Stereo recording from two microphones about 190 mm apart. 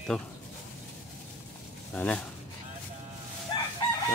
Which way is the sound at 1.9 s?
5° left (ahead or behind).